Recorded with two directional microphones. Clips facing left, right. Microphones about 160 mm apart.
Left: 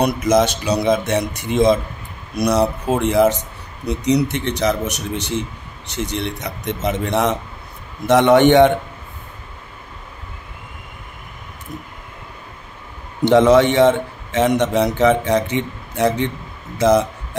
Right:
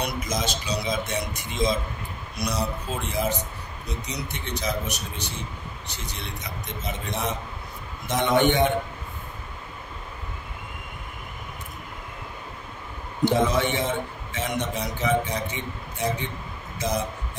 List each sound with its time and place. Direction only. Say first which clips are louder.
0.0 s speech: left 13 dB; 70° left (ahead or behind)
13.2 s speech: left 10 dB; 85° left
16.8 s speech: left 13 dB; 90° left